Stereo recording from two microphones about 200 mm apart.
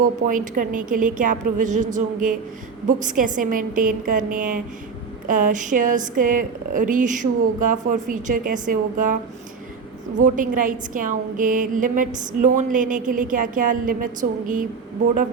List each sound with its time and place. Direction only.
0.3 s a woman's voice: 40° right (ahead or behind)
10.2 s a woman's voice: 40° right (ahead or behind)